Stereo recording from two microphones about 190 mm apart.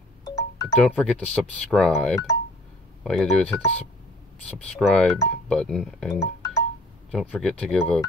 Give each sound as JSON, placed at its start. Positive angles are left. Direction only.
{"t": 0.4, "sound": "music", "side_deg": 15}
{"t": 0.7, "sound": "speech", "side_deg": 5}
{"t": 6.1, "sound": "music", "side_deg": 15}
{"t": 7.1, "sound": "speech", "side_deg": 5}